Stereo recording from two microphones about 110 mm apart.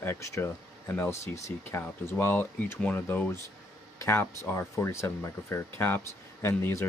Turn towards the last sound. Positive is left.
turn(degrees=25)  # may be behind; listen again after turning